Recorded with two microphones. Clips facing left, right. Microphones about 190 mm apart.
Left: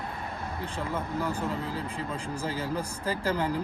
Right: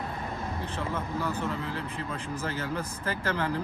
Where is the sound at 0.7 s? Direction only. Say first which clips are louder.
Left 2 dB; 10° left (ahead or behind).